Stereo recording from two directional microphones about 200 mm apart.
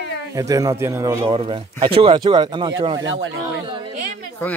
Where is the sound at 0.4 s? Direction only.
15° right (ahead or behind).